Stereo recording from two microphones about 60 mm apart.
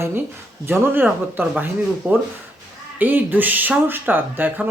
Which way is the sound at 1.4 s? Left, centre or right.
Right.